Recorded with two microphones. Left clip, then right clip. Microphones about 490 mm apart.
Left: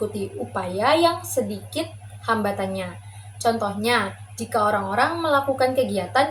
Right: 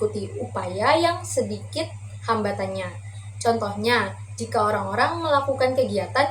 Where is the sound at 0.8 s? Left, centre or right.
Left.